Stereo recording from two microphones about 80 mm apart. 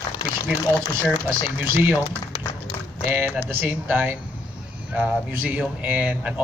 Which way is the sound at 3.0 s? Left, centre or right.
Right.